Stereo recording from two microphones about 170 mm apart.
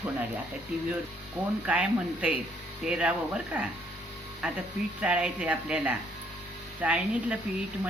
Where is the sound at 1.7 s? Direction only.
10° right (ahead or behind).